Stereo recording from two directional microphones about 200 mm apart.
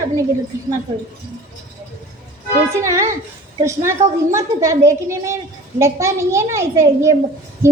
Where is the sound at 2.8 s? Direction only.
15° right (ahead or behind).